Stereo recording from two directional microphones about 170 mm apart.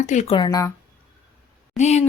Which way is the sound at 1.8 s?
40° left (ahead or behind).